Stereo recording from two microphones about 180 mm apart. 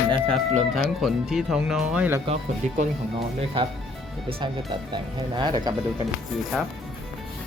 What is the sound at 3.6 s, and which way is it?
Speech, 30° right (ahead or behind).